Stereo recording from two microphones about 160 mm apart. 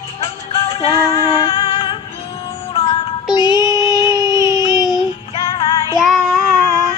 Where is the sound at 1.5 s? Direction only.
35° left (ahead or behind).